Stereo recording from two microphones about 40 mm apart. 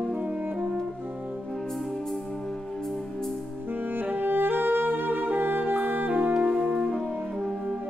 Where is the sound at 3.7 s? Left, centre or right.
Right.